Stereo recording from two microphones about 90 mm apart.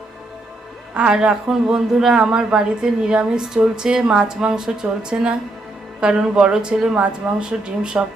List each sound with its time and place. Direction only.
0.9 s a woman's voice: 10° right (ahead or behind)